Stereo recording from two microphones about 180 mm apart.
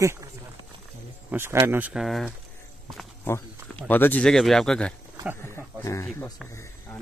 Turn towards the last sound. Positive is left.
turn(degrees=15)  # may be behind; listen again after turning